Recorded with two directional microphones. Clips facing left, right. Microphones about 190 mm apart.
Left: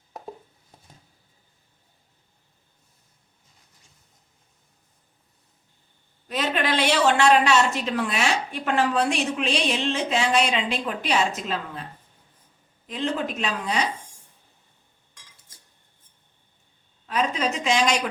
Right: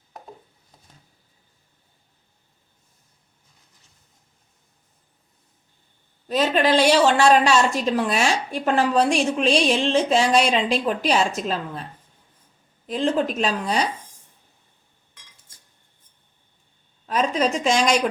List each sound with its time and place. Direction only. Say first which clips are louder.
6.2 s a woman's voice: right 6 dB; 35° right (ahead or behind)
12.9 s a woman's voice: right 5 dB; 40° right (ahead or behind)
17.1 s a woman's voice: right 4 dB; 40° right (ahead or behind)